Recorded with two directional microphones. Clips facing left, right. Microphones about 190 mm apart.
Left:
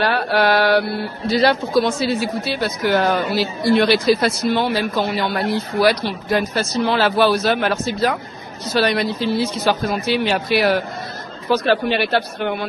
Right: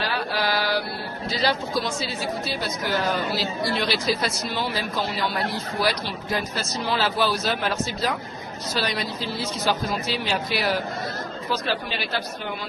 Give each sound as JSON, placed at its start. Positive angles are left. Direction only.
{"t": 0.0, "sound": "speech", "side_deg": 65}